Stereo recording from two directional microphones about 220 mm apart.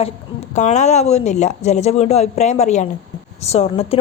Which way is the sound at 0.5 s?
30° left (ahead or behind).